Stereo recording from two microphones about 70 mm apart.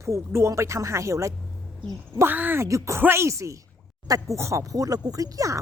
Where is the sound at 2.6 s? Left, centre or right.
Right.